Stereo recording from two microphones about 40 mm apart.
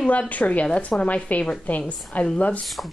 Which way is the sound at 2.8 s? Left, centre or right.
Left.